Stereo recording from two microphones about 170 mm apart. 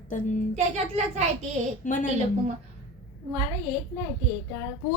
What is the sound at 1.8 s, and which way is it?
Speech, 50° left (ahead or behind).